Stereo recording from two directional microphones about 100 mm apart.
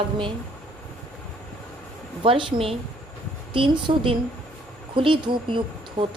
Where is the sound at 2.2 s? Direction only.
60° right (ahead or behind).